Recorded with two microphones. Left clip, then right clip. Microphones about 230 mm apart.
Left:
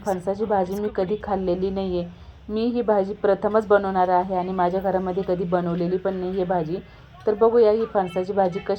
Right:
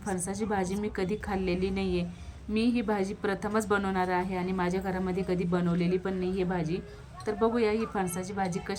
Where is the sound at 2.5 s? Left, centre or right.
Right.